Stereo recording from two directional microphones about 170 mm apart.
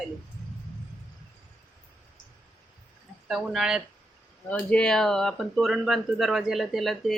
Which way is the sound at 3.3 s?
Centre (ahead or behind).